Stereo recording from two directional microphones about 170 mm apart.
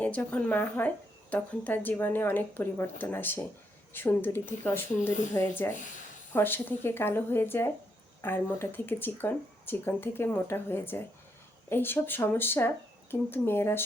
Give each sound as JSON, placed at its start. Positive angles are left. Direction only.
{"t": 0.0, "sound": "speech", "side_deg": 10}